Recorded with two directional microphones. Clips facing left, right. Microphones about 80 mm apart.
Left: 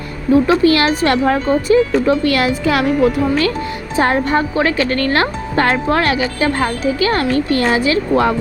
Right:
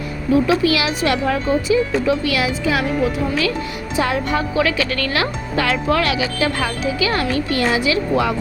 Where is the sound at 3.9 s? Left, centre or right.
Left.